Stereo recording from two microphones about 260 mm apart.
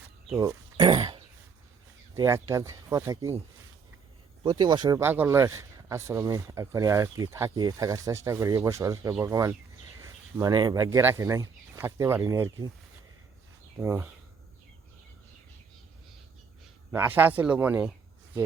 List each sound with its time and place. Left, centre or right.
0.3 s speech: centre
4.4 s speech: centre
13.7 s speech: centre
16.9 s speech: centre